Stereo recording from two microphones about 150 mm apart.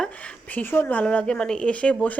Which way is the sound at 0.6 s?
15° left (ahead or behind).